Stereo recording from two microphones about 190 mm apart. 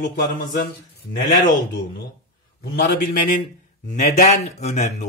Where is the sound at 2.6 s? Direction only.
50° left (ahead or behind).